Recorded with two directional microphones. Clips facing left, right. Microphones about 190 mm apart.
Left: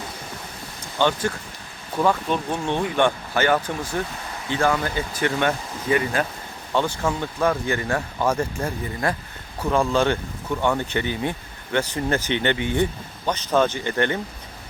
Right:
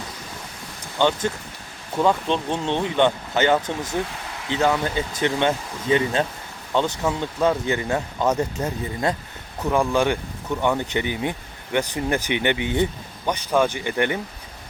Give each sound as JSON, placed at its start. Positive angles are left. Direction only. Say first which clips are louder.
{"t": 0.9, "sound": "speech", "louder": "right 1 dB", "side_deg": -20}